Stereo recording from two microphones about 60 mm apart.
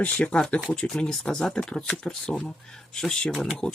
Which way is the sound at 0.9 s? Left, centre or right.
Centre.